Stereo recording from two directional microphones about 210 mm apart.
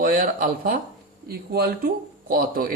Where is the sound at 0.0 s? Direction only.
40° right (ahead or behind).